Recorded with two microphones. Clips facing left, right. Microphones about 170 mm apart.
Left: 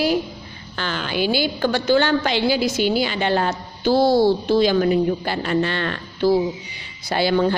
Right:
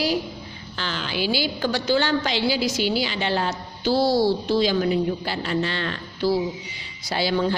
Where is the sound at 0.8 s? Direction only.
55° left (ahead or behind).